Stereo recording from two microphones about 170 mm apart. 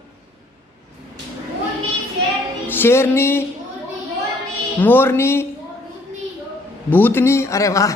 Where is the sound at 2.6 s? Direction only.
10° left (ahead or behind).